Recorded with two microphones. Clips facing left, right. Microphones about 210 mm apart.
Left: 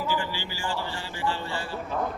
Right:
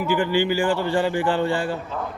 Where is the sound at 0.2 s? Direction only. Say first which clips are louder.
Right 13 dB; 55° right (ahead or behind).